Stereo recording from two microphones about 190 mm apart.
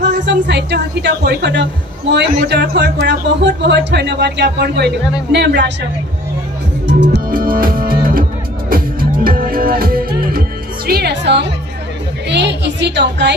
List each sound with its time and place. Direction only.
0.0 s a woman's voice: 65° right (ahead or behind)
6.9 s music: 65° right (ahead or behind)
10.9 s a woman's voice: 55° right (ahead or behind)